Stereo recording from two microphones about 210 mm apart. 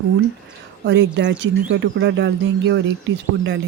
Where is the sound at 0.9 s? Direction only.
60° right (ahead or behind).